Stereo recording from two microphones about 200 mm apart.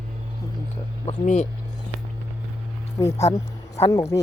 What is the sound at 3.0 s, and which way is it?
Speech, 15° left (ahead or behind).